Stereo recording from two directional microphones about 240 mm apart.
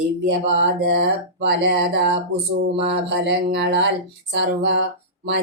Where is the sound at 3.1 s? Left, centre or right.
Right.